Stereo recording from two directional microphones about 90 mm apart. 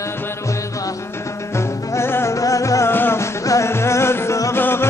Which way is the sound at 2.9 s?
25° left (ahead or behind).